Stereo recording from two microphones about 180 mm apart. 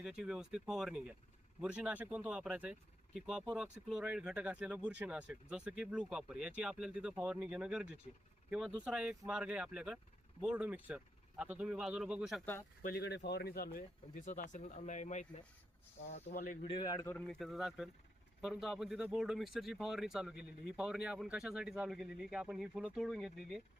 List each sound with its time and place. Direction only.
0.0 s a man's voice: 5° right (ahead or behind)
12.8 s speech: 65° left (ahead or behind)
13.7 s speech: 45° left (ahead or behind)
16.6 s a man's voice: 25° left (ahead or behind)
17.2 s a man's voice: centre (ahead or behind)